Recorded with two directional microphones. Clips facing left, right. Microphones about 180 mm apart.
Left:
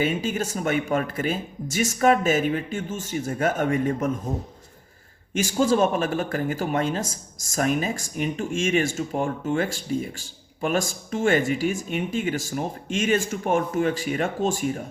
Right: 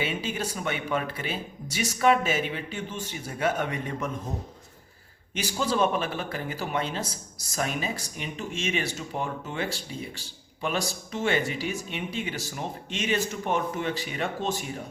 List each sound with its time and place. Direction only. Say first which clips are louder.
0.0 s speech: left 6 dB; 45° left (ahead or behind)
5.3 s speech: left 7 dB; 45° left (ahead or behind)